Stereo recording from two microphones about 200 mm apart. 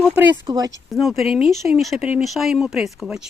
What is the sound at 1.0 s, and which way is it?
Speech, centre (ahead or behind).